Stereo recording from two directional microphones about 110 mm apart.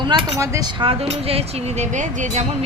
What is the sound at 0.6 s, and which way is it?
Speech, 50° right (ahead or behind).